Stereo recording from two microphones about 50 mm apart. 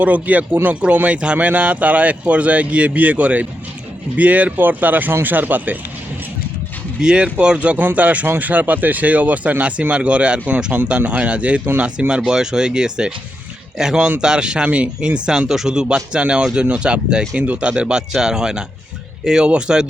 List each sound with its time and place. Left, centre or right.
0.0 s speech: right
7.0 s speech: centre